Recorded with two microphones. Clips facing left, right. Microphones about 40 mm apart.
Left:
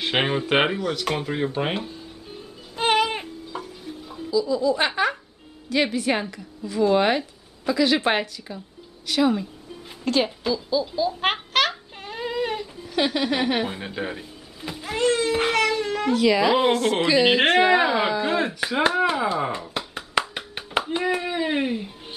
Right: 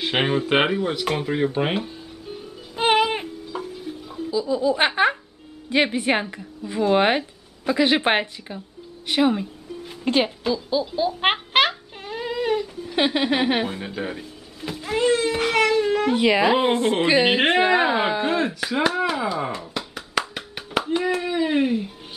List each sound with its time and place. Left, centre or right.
0.0 s a child's voice: centre
0.7 s speech: centre
1.0 s a child's voice: centre
2.7 s music: centre
4.3 s a woman's voice: right
11.5 s a sound: right
12.0 s a sound: centre
12.9 s a woman's voice: right
13.7 s a child's voice: centre
16.1 s a woman's voice: right
18.3 s speech: centre
20.0 s clapping: centre